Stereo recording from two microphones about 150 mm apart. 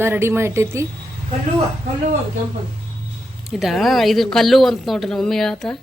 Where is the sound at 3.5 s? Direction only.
Centre (ahead or behind).